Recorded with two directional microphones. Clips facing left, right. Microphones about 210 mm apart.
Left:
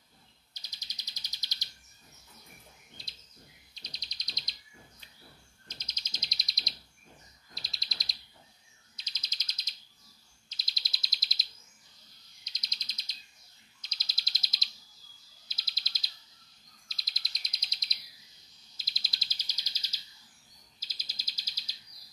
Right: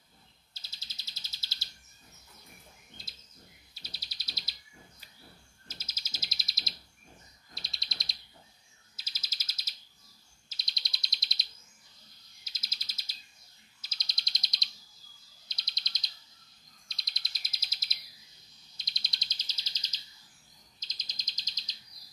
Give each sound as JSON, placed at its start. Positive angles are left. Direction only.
{"t": 0.6, "sound": "bird", "side_deg": 15}
{"t": 3.0, "sound": "bird", "side_deg": 0}
{"t": 5.7, "sound": "bird", "side_deg": -5}
{"t": 12.4, "sound": "bird", "side_deg": -5}